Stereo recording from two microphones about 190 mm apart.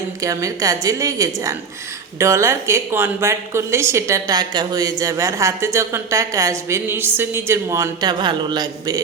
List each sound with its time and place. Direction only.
0.2 s a woman's voice: 15° right (ahead or behind)